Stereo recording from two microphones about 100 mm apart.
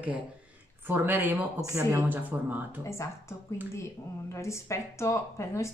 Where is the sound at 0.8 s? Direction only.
20° right (ahead or behind).